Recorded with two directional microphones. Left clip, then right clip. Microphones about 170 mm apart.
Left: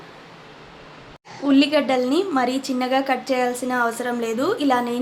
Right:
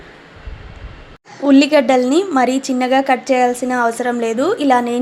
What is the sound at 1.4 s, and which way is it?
A woman's voice, 40° right (ahead or behind).